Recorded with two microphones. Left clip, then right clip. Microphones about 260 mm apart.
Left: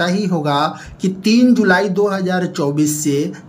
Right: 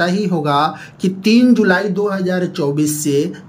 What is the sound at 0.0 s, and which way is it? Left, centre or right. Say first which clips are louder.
Speech: right 1 dB; centre.